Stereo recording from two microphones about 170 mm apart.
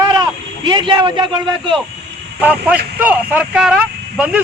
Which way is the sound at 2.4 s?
10° right (ahead or behind).